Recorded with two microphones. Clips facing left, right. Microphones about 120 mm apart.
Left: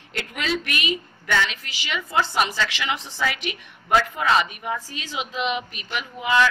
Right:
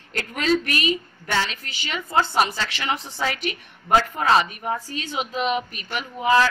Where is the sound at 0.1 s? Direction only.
40° right (ahead or behind).